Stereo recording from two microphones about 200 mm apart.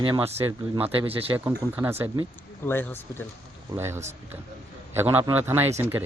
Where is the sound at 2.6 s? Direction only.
10° left (ahead or behind).